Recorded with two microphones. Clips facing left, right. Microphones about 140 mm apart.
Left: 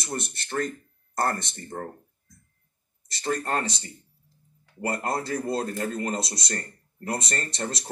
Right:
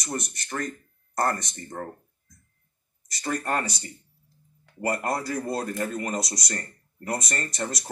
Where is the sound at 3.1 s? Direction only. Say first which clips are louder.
Even; 25° left (ahead or behind).